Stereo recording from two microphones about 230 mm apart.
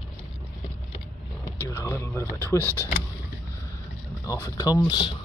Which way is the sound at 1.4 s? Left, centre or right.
Centre.